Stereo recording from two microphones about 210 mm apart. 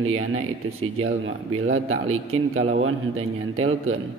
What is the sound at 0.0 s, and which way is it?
A man's voice, 85° right.